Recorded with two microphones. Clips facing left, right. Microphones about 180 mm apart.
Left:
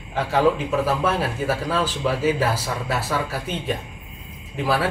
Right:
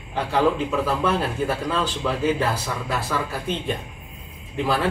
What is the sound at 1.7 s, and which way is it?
A man's voice, 5° left (ahead or behind).